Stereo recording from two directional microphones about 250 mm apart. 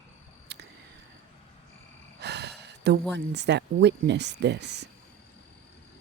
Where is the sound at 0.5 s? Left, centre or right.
Right.